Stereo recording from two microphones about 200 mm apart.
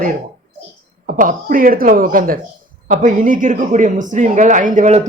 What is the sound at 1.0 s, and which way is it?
Speech, 40° right (ahead or behind).